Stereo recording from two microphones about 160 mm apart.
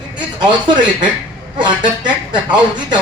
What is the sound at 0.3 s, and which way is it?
A man's voice, 30° right (ahead or behind).